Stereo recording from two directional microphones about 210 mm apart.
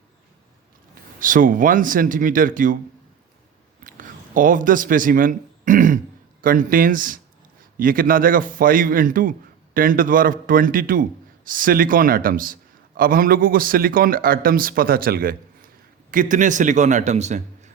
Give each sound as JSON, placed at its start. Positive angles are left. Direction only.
{"t": 1.2, "sound": "a man's voice", "side_deg": -40}
{"t": 3.8, "sound": "a sound", "side_deg": -40}
{"t": 6.4, "sound": "a man's voice", "side_deg": -40}